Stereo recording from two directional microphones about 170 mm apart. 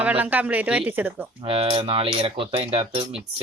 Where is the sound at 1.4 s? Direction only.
35° right (ahead or behind).